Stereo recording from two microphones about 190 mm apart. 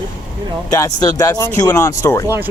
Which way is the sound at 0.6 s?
20° left (ahead or behind).